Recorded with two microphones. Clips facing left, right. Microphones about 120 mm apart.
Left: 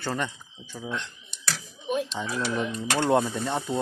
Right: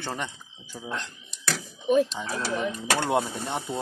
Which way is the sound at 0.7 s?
Centre (ahead or behind).